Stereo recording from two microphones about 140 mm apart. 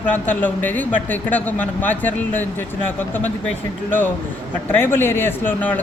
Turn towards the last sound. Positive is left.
turn(degrees=10)  # may be behind; listen again after turning